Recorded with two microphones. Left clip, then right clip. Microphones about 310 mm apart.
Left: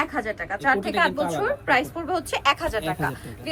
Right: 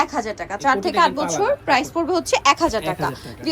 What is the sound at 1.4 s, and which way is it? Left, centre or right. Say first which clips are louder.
A woman's voice: right 5 dB; centre.